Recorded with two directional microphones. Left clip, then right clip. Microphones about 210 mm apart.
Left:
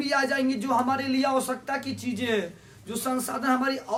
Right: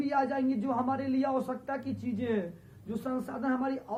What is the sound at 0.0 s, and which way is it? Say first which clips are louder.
Speech: left 5 dB; 10° left (ahead or behind).